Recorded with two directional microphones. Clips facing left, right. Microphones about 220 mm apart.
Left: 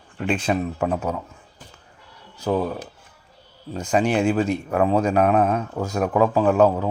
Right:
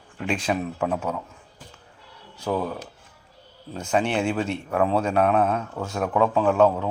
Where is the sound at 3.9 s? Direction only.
5° left (ahead or behind).